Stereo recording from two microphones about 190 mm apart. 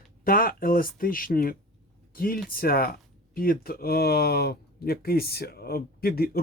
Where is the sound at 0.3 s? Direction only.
50° left (ahead or behind).